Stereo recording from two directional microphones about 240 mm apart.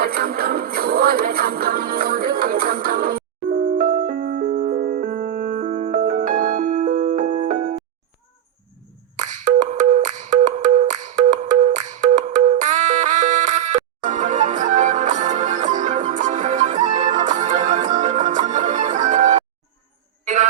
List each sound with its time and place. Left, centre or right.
0.0 s music: right
9.1 s music: right